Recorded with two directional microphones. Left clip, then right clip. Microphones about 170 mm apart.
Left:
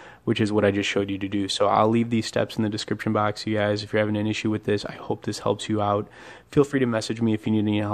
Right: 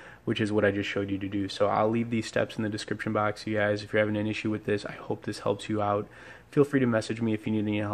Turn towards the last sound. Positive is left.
turn(degrees=25)  # may be behind; listen again after turning